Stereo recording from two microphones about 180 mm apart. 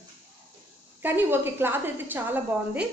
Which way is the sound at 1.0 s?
10° right (ahead or behind).